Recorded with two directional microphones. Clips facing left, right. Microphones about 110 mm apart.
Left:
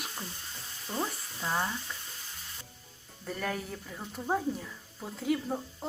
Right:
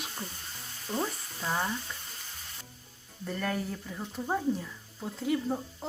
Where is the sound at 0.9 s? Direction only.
Centre (ahead or behind).